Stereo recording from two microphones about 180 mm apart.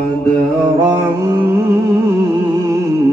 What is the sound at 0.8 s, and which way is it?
Music, 20° right (ahead or behind).